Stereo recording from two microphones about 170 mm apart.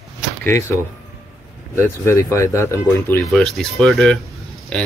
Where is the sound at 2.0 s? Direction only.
15° left (ahead or behind).